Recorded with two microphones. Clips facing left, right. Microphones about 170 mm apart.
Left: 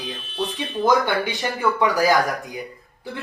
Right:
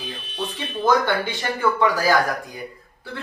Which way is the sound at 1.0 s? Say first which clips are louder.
Even; 15° left (ahead or behind).